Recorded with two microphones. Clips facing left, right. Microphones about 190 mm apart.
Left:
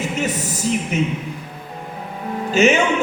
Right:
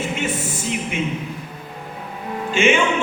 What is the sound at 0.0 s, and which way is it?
A woman's voice, 40° left (ahead or behind).